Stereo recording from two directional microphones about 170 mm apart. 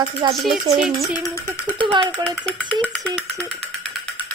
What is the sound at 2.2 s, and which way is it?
A child's voice, centre (ahead or behind).